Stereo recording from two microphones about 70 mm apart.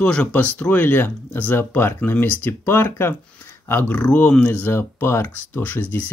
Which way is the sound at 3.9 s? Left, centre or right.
Centre.